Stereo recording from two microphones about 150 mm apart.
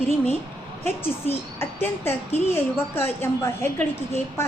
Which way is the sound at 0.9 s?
15° left (ahead or behind).